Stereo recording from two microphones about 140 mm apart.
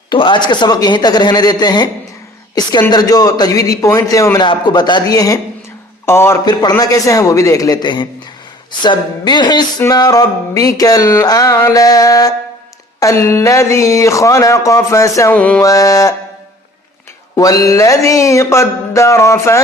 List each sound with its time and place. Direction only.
0.1 s a man's voice: 35° left (ahead or behind)
2.9 s music: 30° left (ahead or behind)
4.4 s a man's voice: 35° left (ahead or behind)
6.4 s music: 30° left (ahead or behind)
15.4 s a man's voice: 10° left (ahead or behind)
15.6 s music: 25° left (ahead or behind)
17.3 s music: 25° left (ahead or behind)